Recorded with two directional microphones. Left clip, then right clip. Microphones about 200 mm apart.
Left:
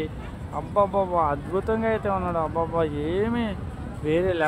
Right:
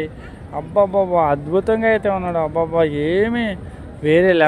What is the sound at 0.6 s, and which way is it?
Speech, 20° right (ahead or behind).